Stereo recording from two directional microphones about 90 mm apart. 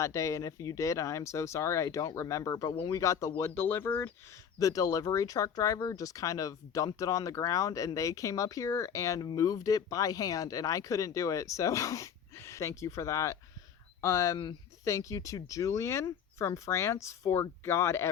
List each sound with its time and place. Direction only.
0.0 s speech: 35° left (ahead or behind)
4.6 s speech: 40° left (ahead or behind)